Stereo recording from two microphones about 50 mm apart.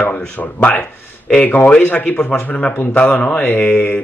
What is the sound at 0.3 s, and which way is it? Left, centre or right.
Mantra, left.